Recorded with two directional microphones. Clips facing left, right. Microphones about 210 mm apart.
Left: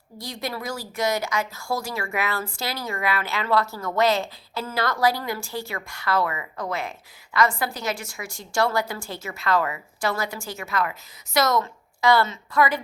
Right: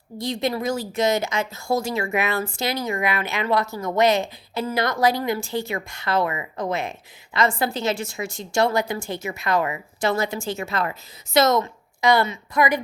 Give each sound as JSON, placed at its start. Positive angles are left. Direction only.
{"t": 0.2, "sound": "a woman's voice", "side_deg": -25}